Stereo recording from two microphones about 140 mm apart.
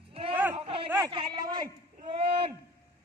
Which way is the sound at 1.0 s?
30° right (ahead or behind).